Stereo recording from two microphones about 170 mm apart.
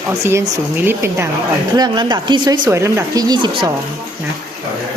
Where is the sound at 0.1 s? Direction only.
15° right (ahead or behind).